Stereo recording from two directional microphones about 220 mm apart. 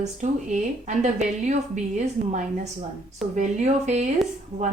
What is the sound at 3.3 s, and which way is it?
Speech, 30° right (ahead or behind).